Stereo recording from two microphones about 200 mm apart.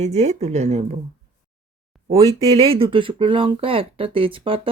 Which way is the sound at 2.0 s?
30° right (ahead or behind).